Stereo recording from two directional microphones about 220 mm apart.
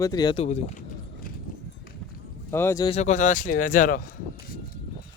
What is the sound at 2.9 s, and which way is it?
Speech, 30° left (ahead or behind).